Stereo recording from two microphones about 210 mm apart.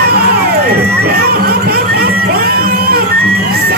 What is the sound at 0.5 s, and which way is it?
Crowd, 45° right (ahead or behind).